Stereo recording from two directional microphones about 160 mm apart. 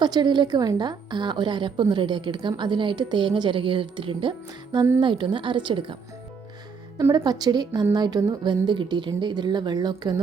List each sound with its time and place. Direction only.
0.0 s a woman's voice: 25° right (ahead or behind)
7.0 s a woman's voice: 25° right (ahead or behind)